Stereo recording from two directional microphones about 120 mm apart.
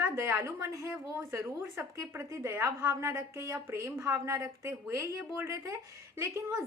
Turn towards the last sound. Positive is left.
turn(degrees=-20)  # may be behind; listen again after turning